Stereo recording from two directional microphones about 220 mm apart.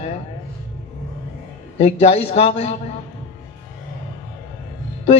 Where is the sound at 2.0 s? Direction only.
25° left (ahead or behind).